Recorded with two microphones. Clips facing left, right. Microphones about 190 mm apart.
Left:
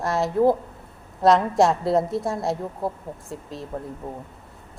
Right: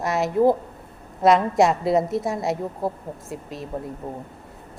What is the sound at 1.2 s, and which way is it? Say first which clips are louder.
A woman's voice: even; centre (ahead or behind).